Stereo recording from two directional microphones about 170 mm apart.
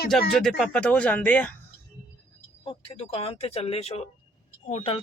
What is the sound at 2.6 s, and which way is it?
Speech, 35° left (ahead or behind).